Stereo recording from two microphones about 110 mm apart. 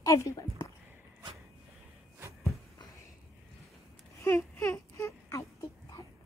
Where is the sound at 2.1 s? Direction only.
30° right (ahead or behind).